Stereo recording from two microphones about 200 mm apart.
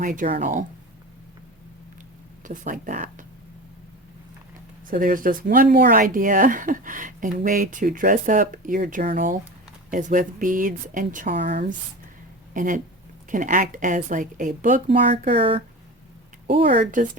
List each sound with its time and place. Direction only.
0.0 s speech: 40° right (ahead or behind)
2.4 s speech: 40° right (ahead or behind)
4.9 s speech: 45° right (ahead or behind)
12.5 s speech: 40° right (ahead or behind)
15.4 s speech: 25° right (ahead or behind)